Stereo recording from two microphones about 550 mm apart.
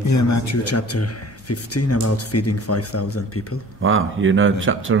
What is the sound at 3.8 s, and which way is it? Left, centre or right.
Speech, right.